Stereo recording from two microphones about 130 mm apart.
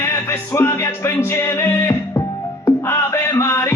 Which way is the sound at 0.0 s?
20° left (ahead or behind).